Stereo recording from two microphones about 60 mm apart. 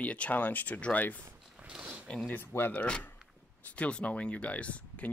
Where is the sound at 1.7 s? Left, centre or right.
Centre.